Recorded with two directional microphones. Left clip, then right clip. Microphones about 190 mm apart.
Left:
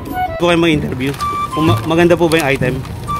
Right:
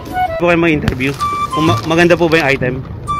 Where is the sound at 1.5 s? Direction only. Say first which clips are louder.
Right 1 dB; centre (ahead or behind).